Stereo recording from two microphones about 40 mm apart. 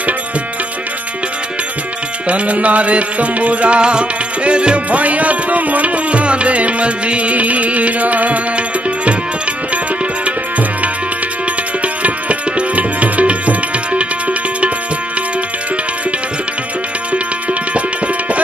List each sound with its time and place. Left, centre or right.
2.2 s music: right
11.8 s music: right
17.7 s music: right